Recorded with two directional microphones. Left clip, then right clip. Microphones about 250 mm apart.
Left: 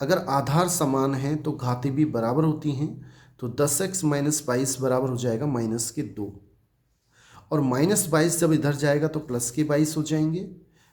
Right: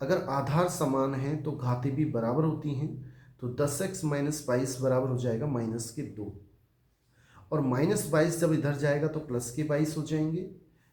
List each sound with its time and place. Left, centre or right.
0.0 s speech: left
7.5 s speech: left